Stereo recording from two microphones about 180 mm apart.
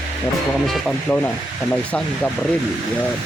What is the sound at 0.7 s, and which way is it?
Speech, 5° left (ahead or behind).